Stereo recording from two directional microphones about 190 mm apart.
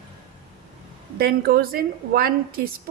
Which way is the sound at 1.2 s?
50° right (ahead or behind).